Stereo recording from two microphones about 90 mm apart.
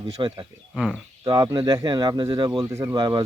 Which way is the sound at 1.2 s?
40° right (ahead or behind).